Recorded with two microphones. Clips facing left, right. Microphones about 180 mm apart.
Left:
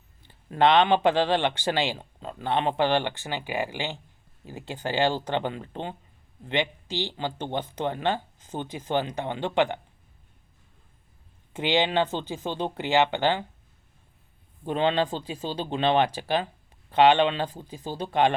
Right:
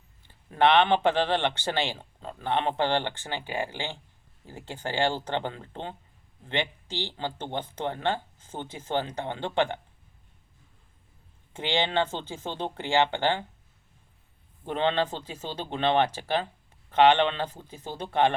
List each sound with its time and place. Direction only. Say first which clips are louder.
0.5 s a man's voice: left 1 dB; 15° left (ahead or behind)
11.5 s a man's voice: left 3 dB; 15° left (ahead or behind)
14.6 s a man's voice: left 2 dB; 15° left (ahead or behind)